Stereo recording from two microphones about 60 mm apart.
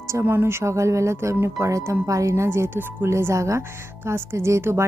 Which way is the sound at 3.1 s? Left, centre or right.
Right.